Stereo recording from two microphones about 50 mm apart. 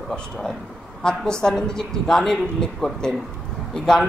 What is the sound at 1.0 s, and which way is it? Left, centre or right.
A man's voice, centre.